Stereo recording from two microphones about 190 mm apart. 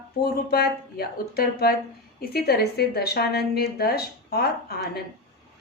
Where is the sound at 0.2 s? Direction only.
55° left (ahead or behind).